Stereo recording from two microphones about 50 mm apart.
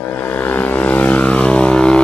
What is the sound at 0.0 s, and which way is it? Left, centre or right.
Vehicle, left.